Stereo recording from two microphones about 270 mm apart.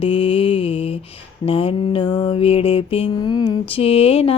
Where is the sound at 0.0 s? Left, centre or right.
Centre.